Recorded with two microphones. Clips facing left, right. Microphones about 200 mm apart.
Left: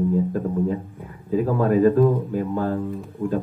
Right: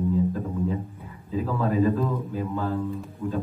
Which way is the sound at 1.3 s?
50° left (ahead or behind).